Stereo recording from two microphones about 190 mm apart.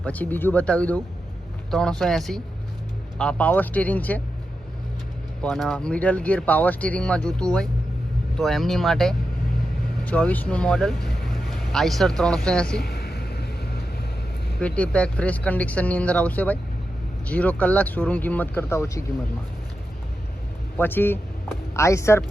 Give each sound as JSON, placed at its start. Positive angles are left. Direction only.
{"t": 0.0, "sound": "speech", "side_deg": 10}
{"t": 5.4, "sound": "speech", "side_deg": 0}
{"t": 12.8, "sound": "vehicle", "side_deg": 55}
{"t": 14.6, "sound": "speech", "side_deg": 5}
{"t": 20.7, "sound": "speech", "side_deg": 10}